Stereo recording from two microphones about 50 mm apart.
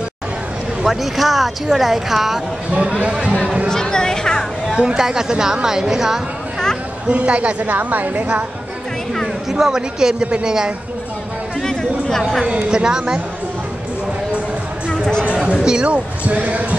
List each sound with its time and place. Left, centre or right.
0.8 s speech: centre
2.7 s a woman's voice: right
3.6 s a sound: centre
4.8 s a woman's voice: centre
7.1 s a woman's voice: right
9.5 s a woman's voice: centre
11.6 s a sound: centre
12.4 s a woman's voice: centre
14.9 s music: centre
15.2 s a woman's voice: right